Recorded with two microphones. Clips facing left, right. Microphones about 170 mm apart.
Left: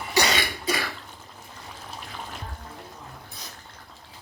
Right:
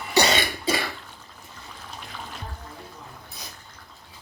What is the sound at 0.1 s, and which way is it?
Cough, 25° right (ahead or behind).